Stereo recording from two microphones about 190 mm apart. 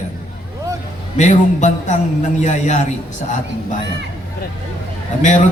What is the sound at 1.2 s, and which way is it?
Speech, 40° left (ahead or behind).